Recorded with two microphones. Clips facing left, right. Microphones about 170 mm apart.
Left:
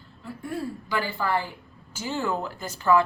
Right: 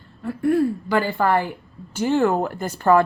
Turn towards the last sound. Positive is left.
turn(degrees=-55)  # may be behind; listen again after turning